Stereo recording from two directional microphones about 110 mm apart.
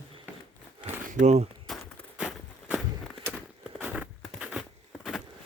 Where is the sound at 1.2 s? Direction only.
85° right.